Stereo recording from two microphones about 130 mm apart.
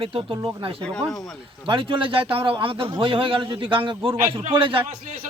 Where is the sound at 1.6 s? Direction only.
40° right (ahead or behind).